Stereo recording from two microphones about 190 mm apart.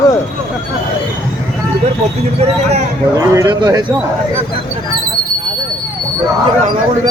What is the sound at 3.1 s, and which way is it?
Speech, 15° right (ahead or behind).